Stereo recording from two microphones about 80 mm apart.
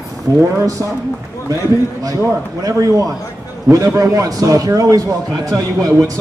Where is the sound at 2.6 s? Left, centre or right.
Right.